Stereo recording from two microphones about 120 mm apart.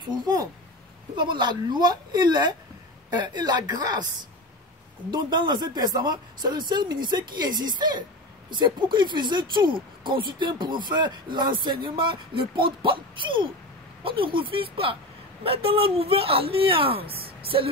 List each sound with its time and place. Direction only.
0.1 s speech: 30° right (ahead or behind)
5.1 s speech: 35° right (ahead or behind)